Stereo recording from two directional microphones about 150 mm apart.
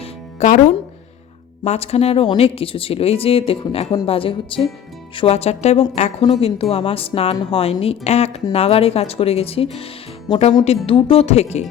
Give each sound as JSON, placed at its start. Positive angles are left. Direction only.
{"t": 0.0, "sound": "music", "side_deg": 50}
{"t": 1.6, "sound": "a woman's voice", "side_deg": 45}